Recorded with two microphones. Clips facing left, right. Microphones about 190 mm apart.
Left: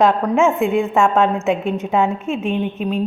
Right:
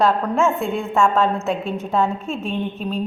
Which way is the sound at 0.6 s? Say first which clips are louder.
Left 4 dB; centre (ahead or behind).